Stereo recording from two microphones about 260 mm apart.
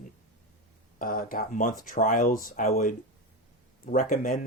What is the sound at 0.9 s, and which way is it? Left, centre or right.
Speech, left.